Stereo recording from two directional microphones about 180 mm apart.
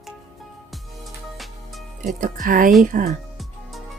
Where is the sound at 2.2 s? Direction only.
50° right (ahead or behind).